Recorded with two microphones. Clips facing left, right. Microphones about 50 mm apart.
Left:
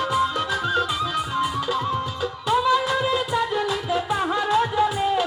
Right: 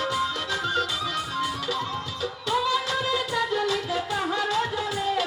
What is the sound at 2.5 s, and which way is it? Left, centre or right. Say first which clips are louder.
Music: left 5 dB; centre.